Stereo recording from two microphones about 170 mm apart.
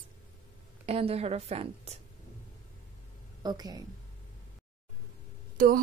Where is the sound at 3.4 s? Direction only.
25° right (ahead or behind).